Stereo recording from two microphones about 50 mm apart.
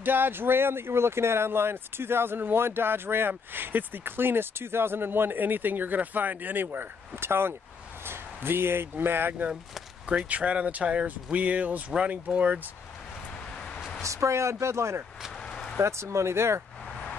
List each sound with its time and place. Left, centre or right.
0.0 s speech: right
10.0 s speech: right
14.0 s speech: right